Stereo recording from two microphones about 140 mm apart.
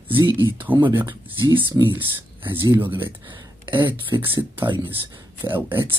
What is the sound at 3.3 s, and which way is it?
Speech, 35° right (ahead or behind).